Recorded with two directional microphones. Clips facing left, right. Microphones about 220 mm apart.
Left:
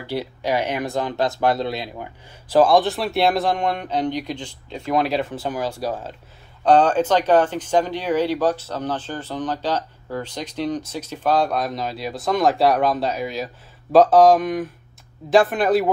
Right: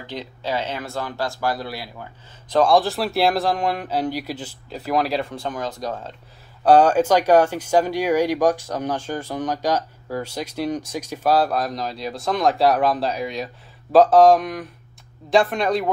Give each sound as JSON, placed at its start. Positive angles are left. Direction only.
{"t": 0.0, "sound": "speech", "side_deg": 10}
{"t": 2.5, "sound": "speech", "side_deg": 0}
{"t": 6.6, "sound": "speech", "side_deg": -10}